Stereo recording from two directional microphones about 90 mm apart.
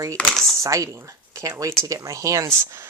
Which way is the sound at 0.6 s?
35° right (ahead or behind).